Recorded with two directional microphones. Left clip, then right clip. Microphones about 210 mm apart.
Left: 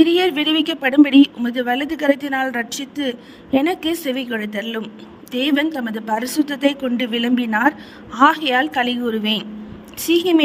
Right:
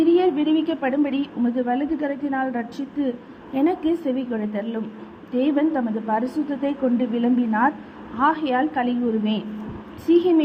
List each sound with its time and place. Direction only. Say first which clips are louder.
0.0 s speech: left 3 dB; 55° left (ahead or behind)